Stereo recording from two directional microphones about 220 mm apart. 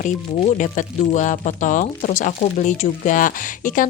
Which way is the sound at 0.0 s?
35° left (ahead or behind).